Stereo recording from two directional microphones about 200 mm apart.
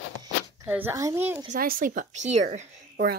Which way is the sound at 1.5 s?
45° right (ahead or behind).